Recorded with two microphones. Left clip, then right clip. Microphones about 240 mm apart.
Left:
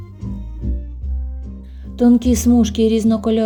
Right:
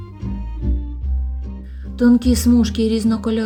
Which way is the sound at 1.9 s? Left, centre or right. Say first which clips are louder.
Left 1 dB; centre.